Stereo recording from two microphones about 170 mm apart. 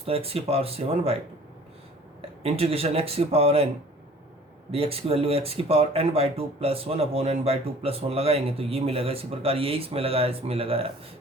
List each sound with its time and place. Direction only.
0.0 s speech: 35° right (ahead or behind)
2.4 s speech: 35° right (ahead or behind)
4.7 s speech: 35° right (ahead or behind)